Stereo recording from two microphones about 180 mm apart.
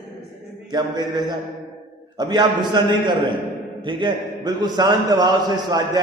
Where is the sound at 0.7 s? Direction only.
25° right (ahead or behind).